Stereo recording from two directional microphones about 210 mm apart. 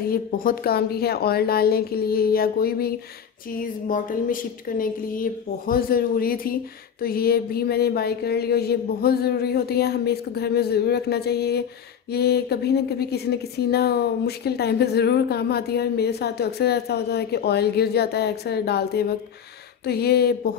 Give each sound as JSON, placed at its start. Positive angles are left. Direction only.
{"t": 0.0, "sound": "a woman's voice", "side_deg": 45}